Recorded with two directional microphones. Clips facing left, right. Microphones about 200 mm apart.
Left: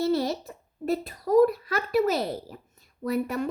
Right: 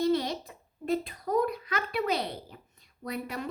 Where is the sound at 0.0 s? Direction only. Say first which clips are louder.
Left 2 dB; 45° left (ahead or behind).